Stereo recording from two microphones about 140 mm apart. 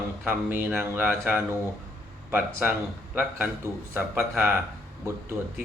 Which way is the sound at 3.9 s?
15° right (ahead or behind).